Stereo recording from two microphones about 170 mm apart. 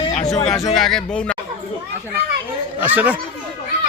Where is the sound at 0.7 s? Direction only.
Centre (ahead or behind).